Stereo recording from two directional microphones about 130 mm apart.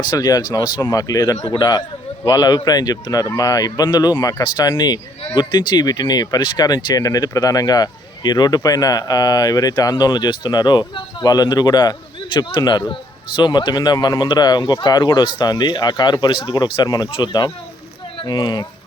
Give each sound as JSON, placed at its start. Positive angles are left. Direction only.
{"t": 0.0, "sound": "speech", "side_deg": 30}